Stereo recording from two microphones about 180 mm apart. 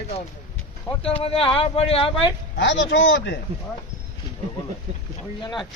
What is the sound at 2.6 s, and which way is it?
Speech, 90° left.